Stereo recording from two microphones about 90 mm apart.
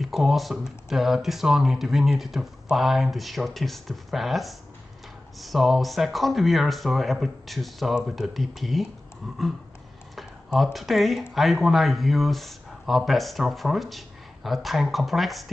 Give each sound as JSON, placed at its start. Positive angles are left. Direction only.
{"t": 0.0, "sound": "speech", "side_deg": 0}
{"t": 10.1, "sound": "speech", "side_deg": 0}